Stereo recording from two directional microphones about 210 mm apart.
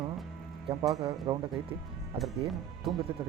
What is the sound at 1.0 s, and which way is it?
Speech, 25° right (ahead or behind).